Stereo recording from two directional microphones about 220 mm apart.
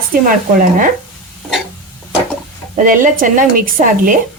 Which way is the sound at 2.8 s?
40° right (ahead or behind).